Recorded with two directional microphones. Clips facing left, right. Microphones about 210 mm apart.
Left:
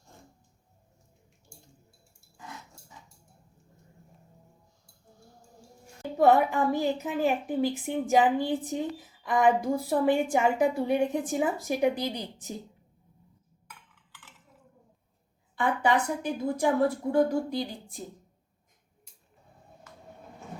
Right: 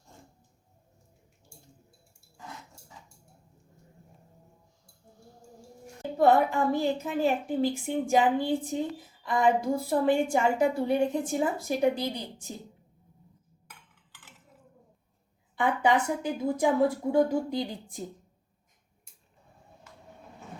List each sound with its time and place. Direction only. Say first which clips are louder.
6.1 s a woman's voice: left 1 dB; 15° left (ahead or behind)
15.5 s a woman's voice: right 1 dB; 15° right (ahead or behind)